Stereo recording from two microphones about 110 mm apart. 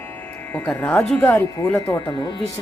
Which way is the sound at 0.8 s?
15° left (ahead or behind).